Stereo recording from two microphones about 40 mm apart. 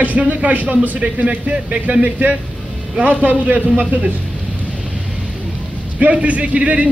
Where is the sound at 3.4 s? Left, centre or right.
Right.